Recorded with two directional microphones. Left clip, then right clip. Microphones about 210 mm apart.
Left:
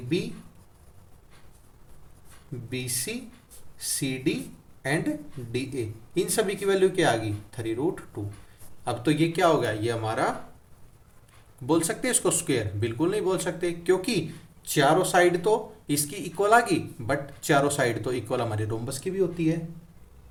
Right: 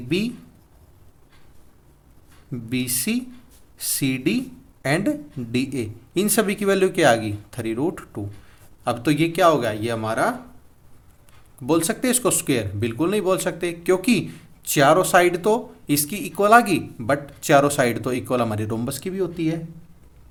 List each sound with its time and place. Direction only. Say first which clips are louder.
2.6 s speech: right 7 dB; 50° right (ahead or behind)
11.6 s speech: right 4 dB; 40° right (ahead or behind)